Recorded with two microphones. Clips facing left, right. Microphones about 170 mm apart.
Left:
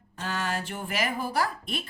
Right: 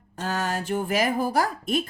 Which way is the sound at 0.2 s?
40° right (ahead or behind).